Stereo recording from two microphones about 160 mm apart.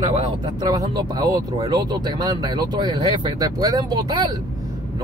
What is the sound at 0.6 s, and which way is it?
Speech, 25° right (ahead or behind).